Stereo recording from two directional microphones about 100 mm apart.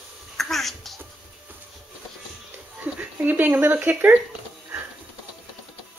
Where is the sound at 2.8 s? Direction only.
15° right (ahead or behind).